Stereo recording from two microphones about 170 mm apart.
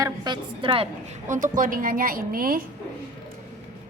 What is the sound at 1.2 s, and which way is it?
A woman's voice, 50° right (ahead or behind).